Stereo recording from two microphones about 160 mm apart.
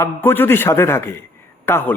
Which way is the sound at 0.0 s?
15° left (ahead or behind).